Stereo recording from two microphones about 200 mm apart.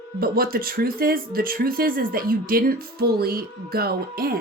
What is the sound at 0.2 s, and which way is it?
Speech, 50° right (ahead or behind).